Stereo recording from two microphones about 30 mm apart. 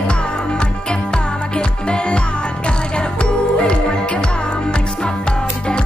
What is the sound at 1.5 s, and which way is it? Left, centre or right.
Music, left.